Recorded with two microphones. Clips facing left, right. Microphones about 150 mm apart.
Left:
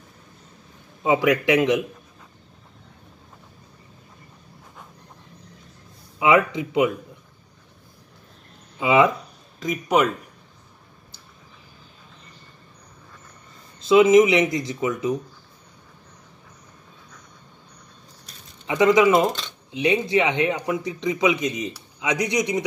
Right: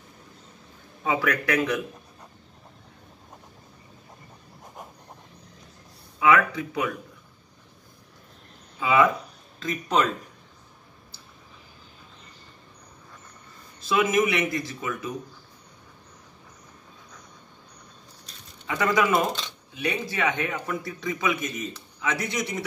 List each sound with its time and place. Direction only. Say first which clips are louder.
1.0 s speech: left 6 dB; 20° left (ahead or behind)
6.1 s speech: left 3 dB; 20° left (ahead or behind)
8.7 s a man's voice: left 3 dB; 20° left (ahead or behind)
13.7 s speech: left 9 dB; 20° left (ahead or behind)
18.7 s a man's voice: left 7 dB; 20° left (ahead or behind)